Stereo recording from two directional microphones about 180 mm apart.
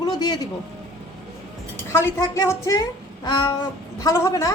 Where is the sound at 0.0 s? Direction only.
20° left (ahead or behind).